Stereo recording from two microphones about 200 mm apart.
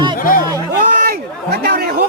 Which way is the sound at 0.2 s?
45° left (ahead or behind).